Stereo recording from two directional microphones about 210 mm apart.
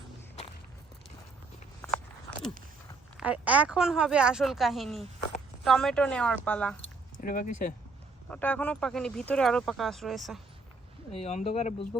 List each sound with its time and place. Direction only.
1.8 s walk: 5° left (ahead or behind)
3.2 s speech: 5° right (ahead or behind)
7.2 s speech: 40° left (ahead or behind)
8.3 s speech: 5° left (ahead or behind)
11.1 s speech: 30° left (ahead or behind)